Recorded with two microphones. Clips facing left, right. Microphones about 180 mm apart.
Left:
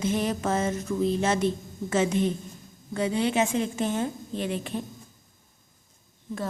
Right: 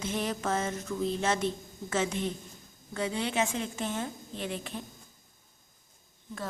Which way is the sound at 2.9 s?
15° left (ahead or behind).